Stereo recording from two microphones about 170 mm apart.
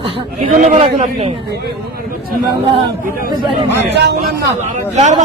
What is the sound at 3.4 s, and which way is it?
Speech, 30° right (ahead or behind).